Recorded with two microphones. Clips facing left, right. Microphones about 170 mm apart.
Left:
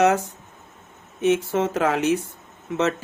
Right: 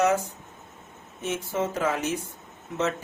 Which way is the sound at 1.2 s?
70° left (ahead or behind).